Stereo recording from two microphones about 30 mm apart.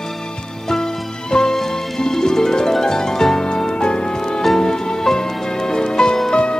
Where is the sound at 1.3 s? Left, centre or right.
Centre.